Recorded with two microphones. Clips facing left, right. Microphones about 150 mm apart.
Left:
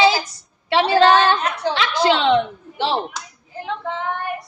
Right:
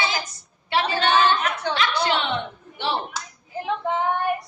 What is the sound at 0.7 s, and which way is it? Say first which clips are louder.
A woman's voice: left 7 dB; 90° left.